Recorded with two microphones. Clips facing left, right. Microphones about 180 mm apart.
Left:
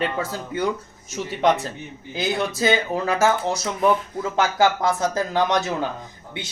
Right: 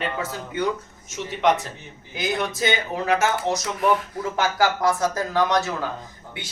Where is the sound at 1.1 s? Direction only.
35° left (ahead or behind).